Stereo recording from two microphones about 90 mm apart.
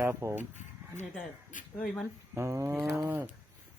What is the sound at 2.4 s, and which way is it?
Speech, 30° right (ahead or behind).